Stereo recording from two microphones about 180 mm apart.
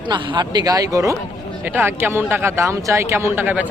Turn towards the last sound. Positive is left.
turn(degrees=-10)  # may be behind; listen again after turning